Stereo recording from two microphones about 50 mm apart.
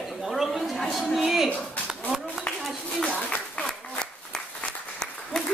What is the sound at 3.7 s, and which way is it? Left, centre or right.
Applause, centre.